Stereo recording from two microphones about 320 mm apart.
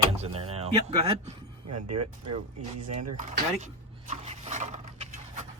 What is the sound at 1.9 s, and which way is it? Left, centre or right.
Speech, right.